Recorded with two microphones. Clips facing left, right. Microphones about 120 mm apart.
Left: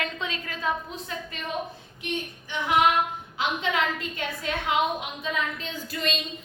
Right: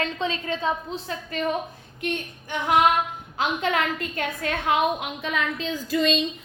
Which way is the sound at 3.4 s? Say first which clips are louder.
Right 2 dB; 45° right (ahead or behind).